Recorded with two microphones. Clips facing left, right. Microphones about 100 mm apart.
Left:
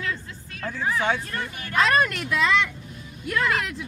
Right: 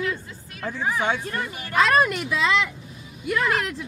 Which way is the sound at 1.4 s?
5° right (ahead or behind).